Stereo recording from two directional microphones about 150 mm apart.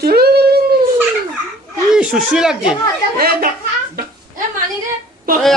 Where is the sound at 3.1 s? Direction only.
85° right.